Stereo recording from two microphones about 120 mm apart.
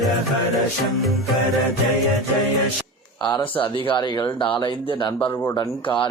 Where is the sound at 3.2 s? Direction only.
35° left (ahead or behind).